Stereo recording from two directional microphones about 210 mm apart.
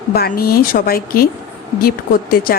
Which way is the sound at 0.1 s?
45° left (ahead or behind).